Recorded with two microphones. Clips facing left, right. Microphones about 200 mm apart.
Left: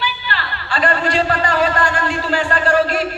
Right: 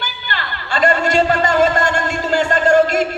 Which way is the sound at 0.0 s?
45° right (ahead or behind).